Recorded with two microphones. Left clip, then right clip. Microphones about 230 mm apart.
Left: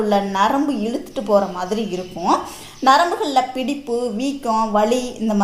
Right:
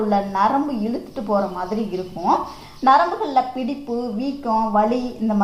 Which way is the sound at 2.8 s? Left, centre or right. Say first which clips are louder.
Left 1 dB; left.